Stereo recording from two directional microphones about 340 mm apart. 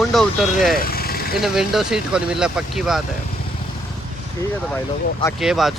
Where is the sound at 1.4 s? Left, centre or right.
Centre.